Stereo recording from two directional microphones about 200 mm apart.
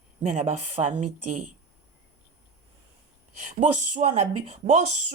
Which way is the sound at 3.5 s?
35° right (ahead or behind).